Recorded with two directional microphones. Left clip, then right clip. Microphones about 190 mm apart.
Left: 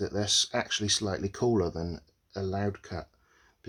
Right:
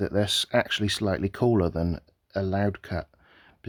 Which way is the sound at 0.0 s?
45° right (ahead or behind).